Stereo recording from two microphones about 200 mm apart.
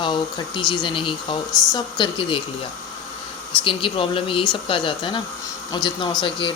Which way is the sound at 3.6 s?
25° left (ahead or behind).